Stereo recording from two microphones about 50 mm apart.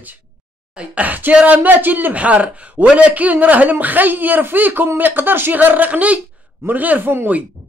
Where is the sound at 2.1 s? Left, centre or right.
Right.